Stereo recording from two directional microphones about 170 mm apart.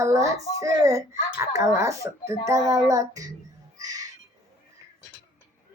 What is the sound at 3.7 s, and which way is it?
Bird, 20° right (ahead or behind).